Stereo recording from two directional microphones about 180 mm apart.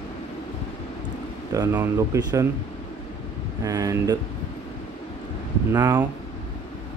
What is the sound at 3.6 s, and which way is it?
Speech, 20° right (ahead or behind).